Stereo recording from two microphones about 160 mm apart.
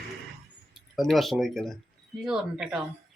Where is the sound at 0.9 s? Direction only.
Centre (ahead or behind).